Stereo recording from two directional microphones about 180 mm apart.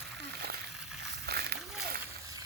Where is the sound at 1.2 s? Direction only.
60° right (ahead or behind).